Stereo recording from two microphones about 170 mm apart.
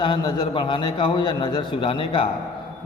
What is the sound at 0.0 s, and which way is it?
A man's voice, 30° left (ahead or behind).